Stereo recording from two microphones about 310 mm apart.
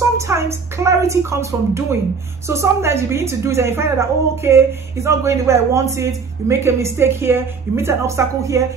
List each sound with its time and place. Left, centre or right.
0.3 s a woman's voice: centre